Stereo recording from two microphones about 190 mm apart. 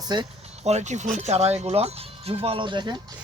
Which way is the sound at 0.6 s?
35° right (ahead or behind).